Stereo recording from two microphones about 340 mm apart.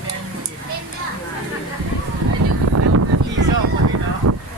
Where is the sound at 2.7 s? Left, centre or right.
Right.